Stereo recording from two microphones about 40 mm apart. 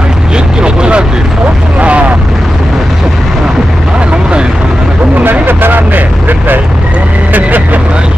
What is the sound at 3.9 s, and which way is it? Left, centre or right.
Vehicle, right.